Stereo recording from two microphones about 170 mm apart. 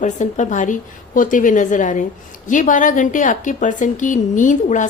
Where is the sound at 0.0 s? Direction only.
45° left (ahead or behind).